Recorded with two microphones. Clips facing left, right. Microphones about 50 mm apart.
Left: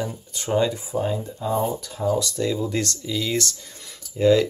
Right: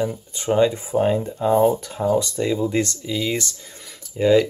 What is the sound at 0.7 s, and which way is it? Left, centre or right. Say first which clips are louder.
Speech: right 6 dB; right.